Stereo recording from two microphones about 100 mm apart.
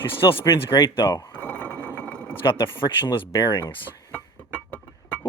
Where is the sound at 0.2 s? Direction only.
40° left (ahead or behind).